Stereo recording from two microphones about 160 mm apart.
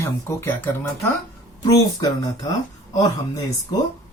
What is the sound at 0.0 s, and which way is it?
Speech, 15° left (ahead or behind).